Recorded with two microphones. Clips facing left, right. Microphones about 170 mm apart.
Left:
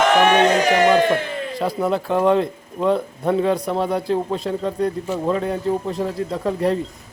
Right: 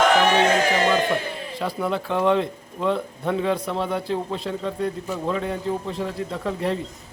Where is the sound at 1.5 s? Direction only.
40° left (ahead or behind).